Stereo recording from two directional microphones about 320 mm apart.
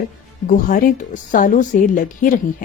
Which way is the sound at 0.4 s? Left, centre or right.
Left.